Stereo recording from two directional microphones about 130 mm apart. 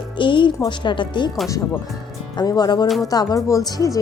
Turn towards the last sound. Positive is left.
turn(degrees=25)  # may be behind; listen again after turning